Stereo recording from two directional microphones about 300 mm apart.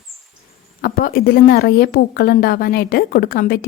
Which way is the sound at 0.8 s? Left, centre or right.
Left.